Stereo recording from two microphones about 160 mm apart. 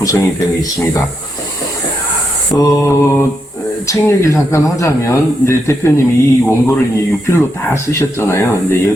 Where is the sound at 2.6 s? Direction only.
15° left (ahead or behind).